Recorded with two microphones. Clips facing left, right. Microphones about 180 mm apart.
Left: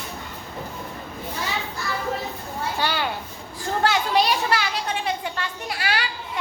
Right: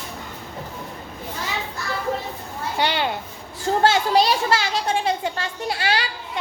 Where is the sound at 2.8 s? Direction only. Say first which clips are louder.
Right 5 dB; 20° right (ahead or behind).